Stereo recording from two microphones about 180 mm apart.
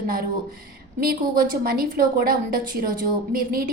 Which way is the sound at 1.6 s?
55° right (ahead or behind).